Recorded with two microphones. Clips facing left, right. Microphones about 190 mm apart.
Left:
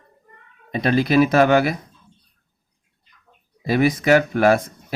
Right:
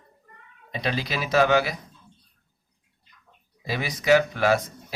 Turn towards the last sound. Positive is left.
turn(degrees=50)  # may be behind; listen again after turning